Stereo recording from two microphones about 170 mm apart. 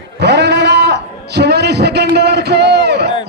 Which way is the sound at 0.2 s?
85° right.